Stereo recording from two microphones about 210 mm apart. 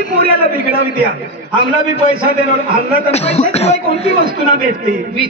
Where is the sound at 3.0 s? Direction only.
30° left (ahead or behind).